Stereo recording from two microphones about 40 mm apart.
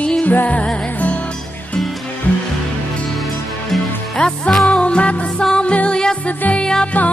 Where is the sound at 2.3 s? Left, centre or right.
Left.